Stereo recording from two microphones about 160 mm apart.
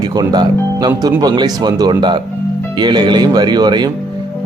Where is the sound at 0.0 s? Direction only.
25° right (ahead or behind).